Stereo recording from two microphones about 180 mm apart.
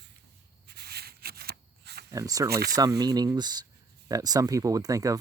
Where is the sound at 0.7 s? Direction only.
60° right (ahead or behind).